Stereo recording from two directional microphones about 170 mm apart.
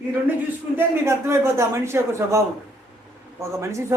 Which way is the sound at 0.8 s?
15° right (ahead or behind).